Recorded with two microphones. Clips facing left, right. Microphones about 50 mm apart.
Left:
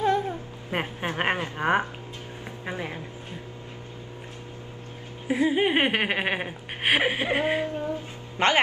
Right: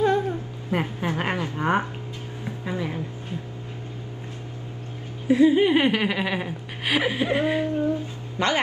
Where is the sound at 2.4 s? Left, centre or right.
Left.